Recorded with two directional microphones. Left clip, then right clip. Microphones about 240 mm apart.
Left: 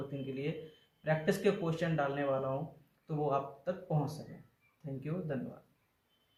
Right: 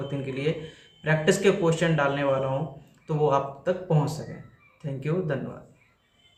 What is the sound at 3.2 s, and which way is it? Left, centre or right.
Speech, centre.